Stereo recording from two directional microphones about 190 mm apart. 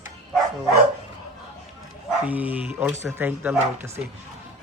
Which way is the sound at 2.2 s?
10° right (ahead or behind).